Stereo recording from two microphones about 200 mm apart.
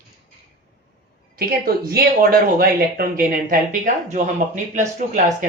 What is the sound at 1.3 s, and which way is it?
Speech, 50° right (ahead or behind).